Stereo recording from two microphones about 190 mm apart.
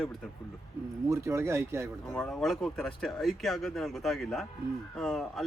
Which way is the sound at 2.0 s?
Centre (ahead or behind).